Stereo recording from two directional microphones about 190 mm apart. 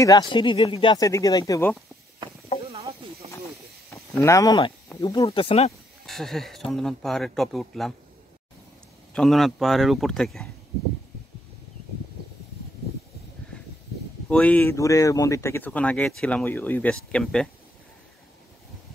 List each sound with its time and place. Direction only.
0.0 s speech: 20° left (ahead or behind)
4.2 s speech: 15° left (ahead or behind)
6.0 s speech: centre (ahead or behind)
9.1 s speech: centre (ahead or behind)
14.3 s speech: 5° left (ahead or behind)